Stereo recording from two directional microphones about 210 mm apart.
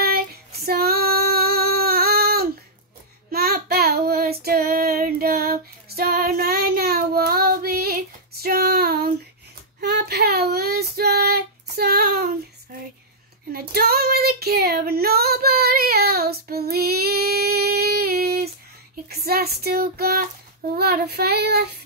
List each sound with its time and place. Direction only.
0.7 s female singing: 45° right (ahead or behind)
3.3 s child singing: 45° right (ahead or behind)
13.5 s child singing: 45° right (ahead or behind)